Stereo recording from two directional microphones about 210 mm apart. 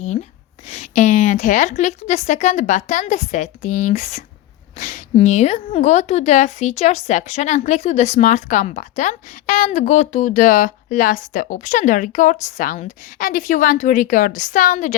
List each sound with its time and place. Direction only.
0.7 s a woman's voice: 35° left (ahead or behind)